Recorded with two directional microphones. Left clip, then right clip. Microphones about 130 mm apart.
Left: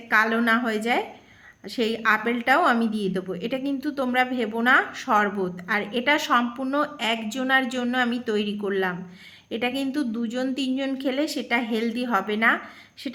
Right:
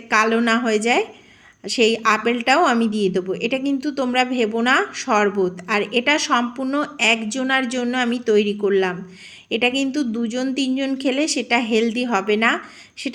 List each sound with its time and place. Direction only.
0.1 s a woman's voice: 20° right (ahead or behind)